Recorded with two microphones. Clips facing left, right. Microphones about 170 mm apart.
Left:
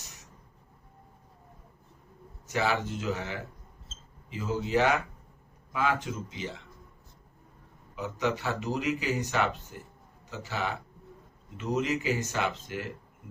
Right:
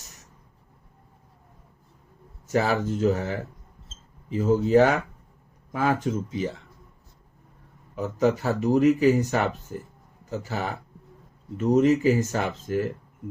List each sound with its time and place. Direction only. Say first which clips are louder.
2.5 s speech: right 6 dB; 40° right (ahead or behind)
7.9 s speech: right 7 dB; 45° right (ahead or behind)